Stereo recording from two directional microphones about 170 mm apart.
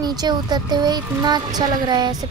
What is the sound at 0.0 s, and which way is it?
Speech, 25° right (ahead or behind).